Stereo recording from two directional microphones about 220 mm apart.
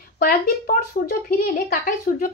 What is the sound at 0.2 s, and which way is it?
A woman's voice, 40° left (ahead or behind).